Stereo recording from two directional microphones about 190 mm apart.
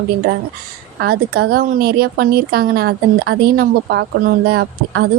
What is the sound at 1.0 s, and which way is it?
A woman's voice, 55° right (ahead or behind).